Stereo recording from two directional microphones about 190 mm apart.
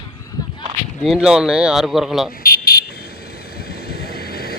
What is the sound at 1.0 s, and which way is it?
Speech, 5° right (ahead or behind).